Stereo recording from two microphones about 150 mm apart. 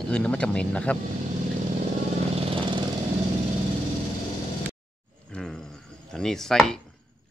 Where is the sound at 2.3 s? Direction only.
35° right (ahead or behind).